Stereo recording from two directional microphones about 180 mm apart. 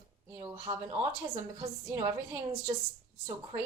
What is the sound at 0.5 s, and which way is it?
Speech, 30° right (ahead or behind).